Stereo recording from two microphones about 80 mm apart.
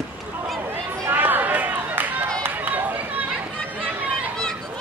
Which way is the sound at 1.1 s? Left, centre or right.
Right.